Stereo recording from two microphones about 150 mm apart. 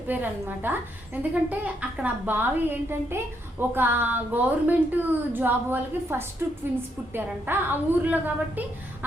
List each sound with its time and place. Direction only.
0.1 s a woman's voice: 15° right (ahead or behind)